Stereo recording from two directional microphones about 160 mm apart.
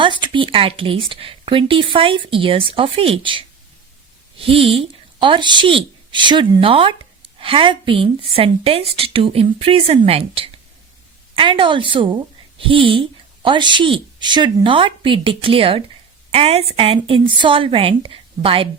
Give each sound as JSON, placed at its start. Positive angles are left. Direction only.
{"t": 0.0, "sound": "a woman's voice", "side_deg": -30}